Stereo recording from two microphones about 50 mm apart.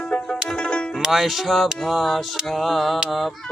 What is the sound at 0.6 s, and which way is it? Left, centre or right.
Music, left.